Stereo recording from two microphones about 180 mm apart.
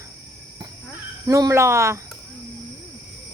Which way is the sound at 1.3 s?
20° right (ahead or behind).